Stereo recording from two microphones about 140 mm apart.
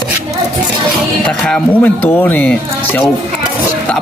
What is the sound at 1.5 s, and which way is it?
Speech, 10° left (ahead or behind).